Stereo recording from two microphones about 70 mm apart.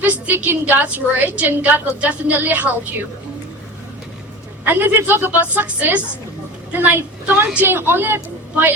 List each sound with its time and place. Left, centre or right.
0.0 s a woman's voice: right
4.6 s a woman's voice: right